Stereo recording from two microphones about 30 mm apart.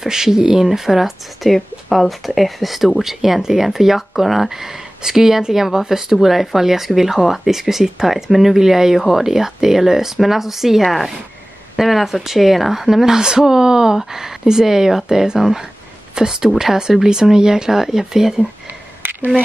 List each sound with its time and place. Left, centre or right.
0.0 s speech: centre
1.4 s speech: centre